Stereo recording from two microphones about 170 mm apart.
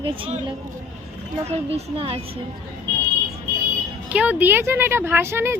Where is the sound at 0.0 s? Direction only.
30° right (ahead or behind).